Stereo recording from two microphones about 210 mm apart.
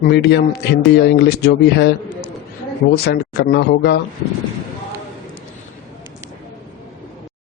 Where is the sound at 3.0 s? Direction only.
50° left (ahead or behind).